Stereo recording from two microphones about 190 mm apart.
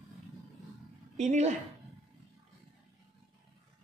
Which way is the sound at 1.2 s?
40° right (ahead or behind).